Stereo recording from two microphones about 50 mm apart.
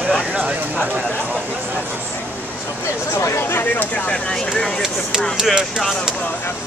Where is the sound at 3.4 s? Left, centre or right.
Left.